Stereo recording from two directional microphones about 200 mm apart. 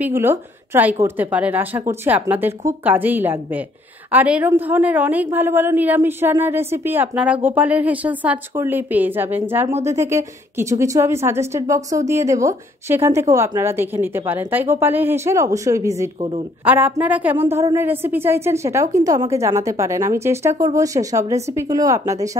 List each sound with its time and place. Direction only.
0.0 s a woman's voice: 10° right (ahead or behind)
16.2 s a woman's voice: 25° right (ahead or behind)
16.6 s a woman's voice: 10° right (ahead or behind)